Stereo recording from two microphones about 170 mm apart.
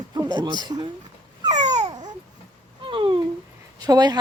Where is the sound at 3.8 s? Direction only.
25° right (ahead or behind).